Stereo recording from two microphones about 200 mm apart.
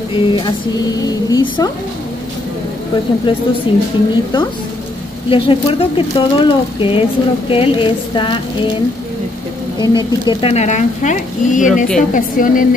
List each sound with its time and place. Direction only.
0.1 s speech: 25° left (ahead or behind)
3.3 s speech: 25° left (ahead or behind)
9.9 s speech: 25° left (ahead or behind)
11.6 s a woman's voice: 5° right (ahead or behind)
12.0 s speech: 40° left (ahead or behind)